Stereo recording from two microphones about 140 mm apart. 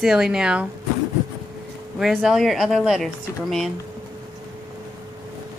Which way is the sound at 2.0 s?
Centre (ahead or behind).